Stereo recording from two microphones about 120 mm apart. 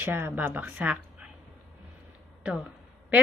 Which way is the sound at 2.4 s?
10° right (ahead or behind).